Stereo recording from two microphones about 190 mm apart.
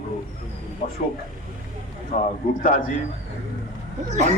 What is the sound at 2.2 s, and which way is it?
Speech, 45° left (ahead or behind).